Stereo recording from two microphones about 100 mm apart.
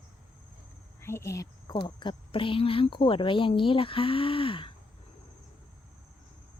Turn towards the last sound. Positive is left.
turn(degrees=60)  # may be behind; listen again after turning